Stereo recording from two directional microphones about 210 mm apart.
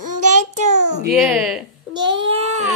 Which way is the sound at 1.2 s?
5° right (ahead or behind).